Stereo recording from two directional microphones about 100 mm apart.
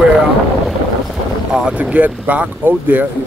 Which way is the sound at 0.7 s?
5° right (ahead or behind).